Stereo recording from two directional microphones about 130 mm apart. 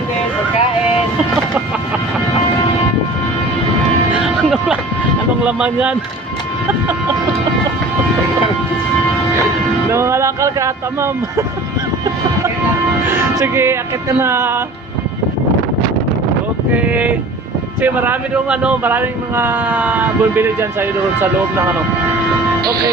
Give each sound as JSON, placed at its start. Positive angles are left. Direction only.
{"t": 4.2, "sound": "vehicle", "side_deg": -5}
{"t": 5.4, "sound": "speech", "side_deg": -10}
{"t": 9.9, "sound": "speech", "side_deg": -20}
{"t": 13.4, "sound": "speech", "side_deg": -20}
{"t": 16.7, "sound": "speech", "side_deg": -10}